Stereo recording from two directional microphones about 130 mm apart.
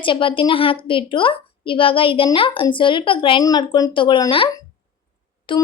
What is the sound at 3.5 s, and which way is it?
A child's voice, 30° left (ahead or behind).